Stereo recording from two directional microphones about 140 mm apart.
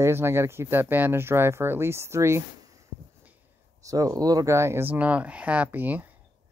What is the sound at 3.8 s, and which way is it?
Speech, 25° right (ahead or behind).